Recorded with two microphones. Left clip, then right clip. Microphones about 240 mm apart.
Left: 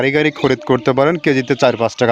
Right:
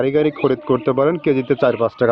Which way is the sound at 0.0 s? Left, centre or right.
Left.